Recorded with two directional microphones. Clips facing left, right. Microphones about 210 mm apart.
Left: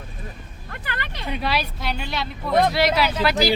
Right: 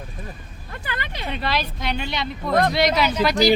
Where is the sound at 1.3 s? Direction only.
10° left (ahead or behind).